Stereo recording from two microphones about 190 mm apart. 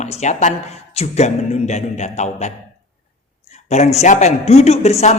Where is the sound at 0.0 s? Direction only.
35° left (ahead or behind).